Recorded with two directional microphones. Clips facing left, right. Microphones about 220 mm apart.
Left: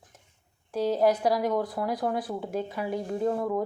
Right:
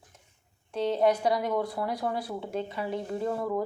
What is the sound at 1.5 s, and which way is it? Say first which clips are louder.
Speech: left 1 dB; 20° left (ahead or behind).